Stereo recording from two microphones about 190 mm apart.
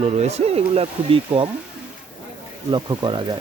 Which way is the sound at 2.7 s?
25° right (ahead or behind).